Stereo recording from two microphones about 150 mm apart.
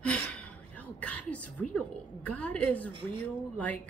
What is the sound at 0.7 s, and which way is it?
A woman's voice, 10° left (ahead or behind).